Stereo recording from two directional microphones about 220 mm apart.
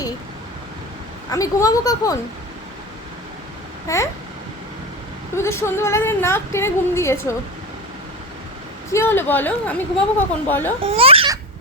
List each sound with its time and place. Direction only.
1.3 s a woman's voice: 15° left (ahead or behind)
3.8 s a woman's voice: 15° left (ahead or behind)
5.4 s a woman's voice: 10° left (ahead or behind)
8.9 s a woman's voice: 10° left (ahead or behind)
10.8 s speech: 25° right (ahead or behind)